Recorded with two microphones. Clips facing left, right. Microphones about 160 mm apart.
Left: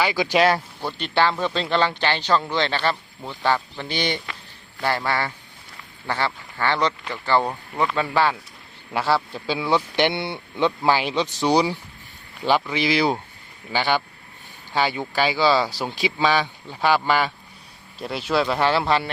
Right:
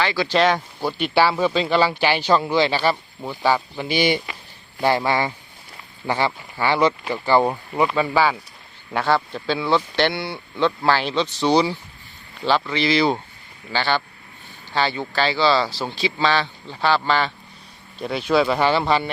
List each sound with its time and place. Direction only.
0.0 s speech: 15° left (ahead or behind); by 7.9 s 15° right (ahead or behind)
7.9 s speech: centre (ahead or behind)